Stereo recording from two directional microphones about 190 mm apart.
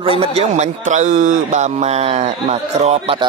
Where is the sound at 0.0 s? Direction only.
30° right (ahead or behind).